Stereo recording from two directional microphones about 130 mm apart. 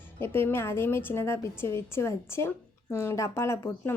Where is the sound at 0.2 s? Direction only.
15° left (ahead or behind).